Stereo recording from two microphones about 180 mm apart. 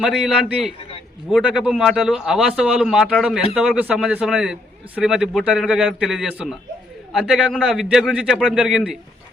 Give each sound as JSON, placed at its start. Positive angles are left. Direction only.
{"t": 0.0, "sound": "speech", "side_deg": 0}
{"t": 0.8, "sound": "a sound", "side_deg": 30}
{"t": 1.3, "sound": "speech", "side_deg": 0}